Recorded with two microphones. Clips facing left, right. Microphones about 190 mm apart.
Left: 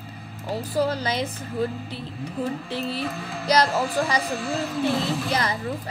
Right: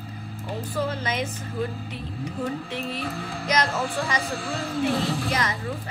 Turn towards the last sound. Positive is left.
turn(degrees=35)  # may be behind; listen again after turning